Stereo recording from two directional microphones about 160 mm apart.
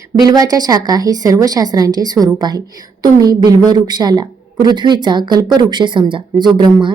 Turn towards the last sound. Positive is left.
turn(degrees=-25)  # may be behind; listen again after turning